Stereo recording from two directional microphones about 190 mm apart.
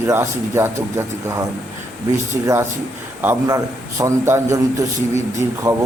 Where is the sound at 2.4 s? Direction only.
15° right (ahead or behind).